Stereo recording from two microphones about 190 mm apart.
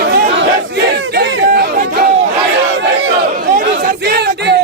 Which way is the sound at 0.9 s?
65° right (ahead or behind).